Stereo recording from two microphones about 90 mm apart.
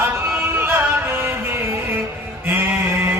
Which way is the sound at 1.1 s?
30° right (ahead or behind).